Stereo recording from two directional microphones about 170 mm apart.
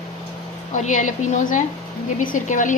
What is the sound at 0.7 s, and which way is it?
A woman's voice, 45° left (ahead or behind).